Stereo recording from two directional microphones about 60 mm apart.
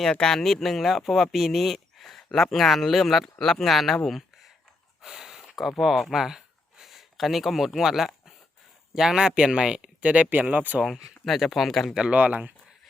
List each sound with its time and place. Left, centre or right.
0.0 s speech: centre; by 10.8 s right
11.3 s speech: centre
11.9 s speech: right